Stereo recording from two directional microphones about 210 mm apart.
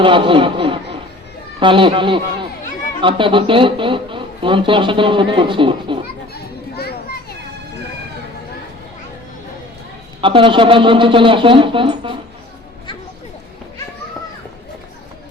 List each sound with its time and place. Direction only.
0.0 s a man's voice: 25° right (ahead or behind)
6.3 s children playing: 50° left (ahead or behind)
10.2 s a man's voice: 25° right (ahead or behind)